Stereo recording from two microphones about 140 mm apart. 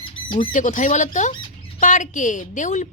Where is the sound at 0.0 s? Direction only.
40° left (ahead or behind).